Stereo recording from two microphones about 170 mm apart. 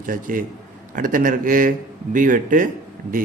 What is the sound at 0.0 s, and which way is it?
A man's voice, 55° right (ahead or behind).